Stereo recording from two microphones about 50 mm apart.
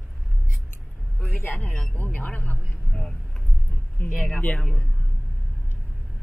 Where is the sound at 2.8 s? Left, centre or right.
Centre.